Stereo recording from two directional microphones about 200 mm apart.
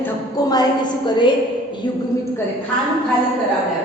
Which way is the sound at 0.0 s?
20° left (ahead or behind).